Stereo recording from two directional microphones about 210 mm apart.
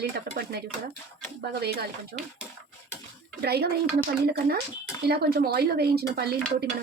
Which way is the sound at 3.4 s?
50° right (ahead or behind).